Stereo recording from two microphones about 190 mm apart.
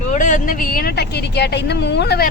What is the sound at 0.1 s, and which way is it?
Speech, 40° left (ahead or behind).